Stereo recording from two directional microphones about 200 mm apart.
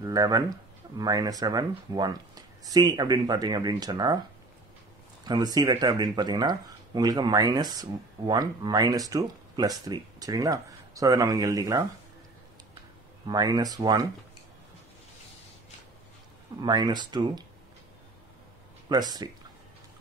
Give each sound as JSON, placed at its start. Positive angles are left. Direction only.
{"t": 0.0, "sound": "speech", "side_deg": -20}
{"t": 5.2, "sound": "speech", "side_deg": -20}
{"t": 13.3, "sound": "speech", "side_deg": -20}
{"t": 16.6, "sound": "speech", "side_deg": -20}
{"t": 18.9, "sound": "speech", "side_deg": -20}